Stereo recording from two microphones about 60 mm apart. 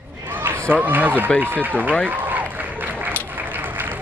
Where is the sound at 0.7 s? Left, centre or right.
Right.